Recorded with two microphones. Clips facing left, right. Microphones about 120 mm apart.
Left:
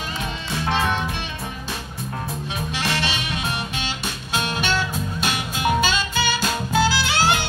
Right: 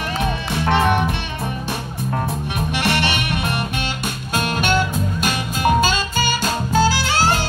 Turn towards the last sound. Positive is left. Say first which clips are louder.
# right 2 dB
turn(degrees=-40)  # may be behind; listen again after turning